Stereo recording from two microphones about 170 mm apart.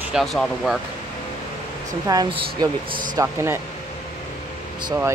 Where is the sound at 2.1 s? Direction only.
25° right (ahead or behind).